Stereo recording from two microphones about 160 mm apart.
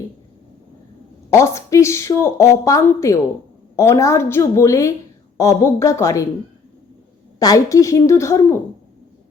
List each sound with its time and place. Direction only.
1.3 s a woman's voice: 20° left (ahead or behind)
7.3 s a woman's voice: 20° left (ahead or behind)